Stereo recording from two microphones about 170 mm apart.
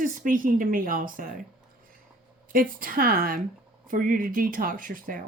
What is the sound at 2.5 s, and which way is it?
Speech, 55° right (ahead or behind).